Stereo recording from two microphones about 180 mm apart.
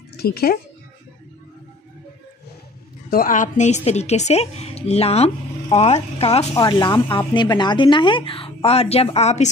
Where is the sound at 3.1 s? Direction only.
50° left (ahead or behind); by 6.4 s 35° left (ahead or behind).